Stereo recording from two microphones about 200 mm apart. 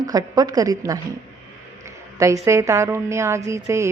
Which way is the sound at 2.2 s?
15° right (ahead or behind).